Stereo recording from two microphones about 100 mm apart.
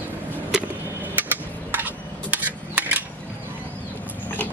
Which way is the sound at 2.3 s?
15° right (ahead or behind).